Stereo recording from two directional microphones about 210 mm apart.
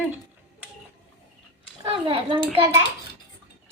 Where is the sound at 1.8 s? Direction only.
25° right (ahead or behind).